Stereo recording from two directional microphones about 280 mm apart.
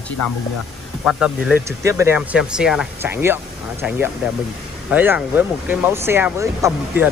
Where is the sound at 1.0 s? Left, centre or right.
Centre.